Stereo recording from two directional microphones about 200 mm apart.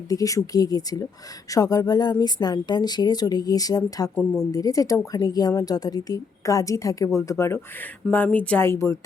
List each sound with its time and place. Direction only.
0.1 s a woman's voice: 15° left (ahead or behind)